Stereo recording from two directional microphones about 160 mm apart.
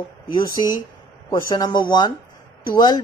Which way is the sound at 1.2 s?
25° left (ahead or behind).